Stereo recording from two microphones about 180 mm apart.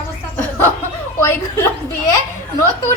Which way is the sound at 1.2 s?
15° left (ahead or behind).